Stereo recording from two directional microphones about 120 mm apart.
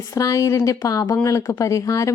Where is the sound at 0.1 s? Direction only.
25° left (ahead or behind).